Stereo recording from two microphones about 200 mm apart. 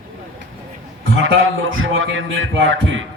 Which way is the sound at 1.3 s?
80° right.